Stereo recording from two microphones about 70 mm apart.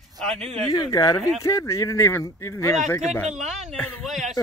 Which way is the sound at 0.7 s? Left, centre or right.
Left.